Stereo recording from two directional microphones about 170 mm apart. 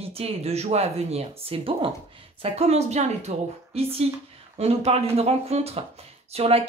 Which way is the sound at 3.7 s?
35° right (ahead or behind).